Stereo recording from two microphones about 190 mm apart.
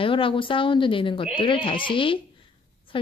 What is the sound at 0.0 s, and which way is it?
Speech, 25° left (ahead or behind).